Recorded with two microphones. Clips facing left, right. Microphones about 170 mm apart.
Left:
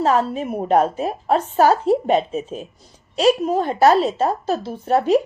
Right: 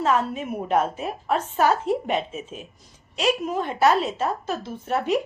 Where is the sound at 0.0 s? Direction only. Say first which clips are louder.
Left 4 dB; 35° left (ahead or behind).